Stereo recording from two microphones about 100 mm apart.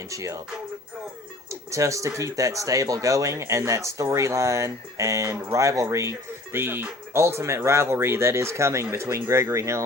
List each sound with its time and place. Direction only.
0.1 s speech: 35° right (ahead or behind)
1.5 s speech: 30° right (ahead or behind)